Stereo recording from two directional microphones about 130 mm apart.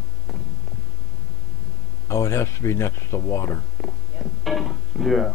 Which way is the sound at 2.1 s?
20° left (ahead or behind).